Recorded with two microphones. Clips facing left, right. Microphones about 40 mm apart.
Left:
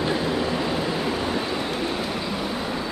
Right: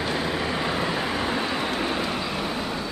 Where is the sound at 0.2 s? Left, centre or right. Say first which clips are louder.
Left 2 dB; centre.